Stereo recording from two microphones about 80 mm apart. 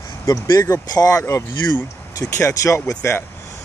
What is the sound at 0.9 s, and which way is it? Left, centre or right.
Speech, left.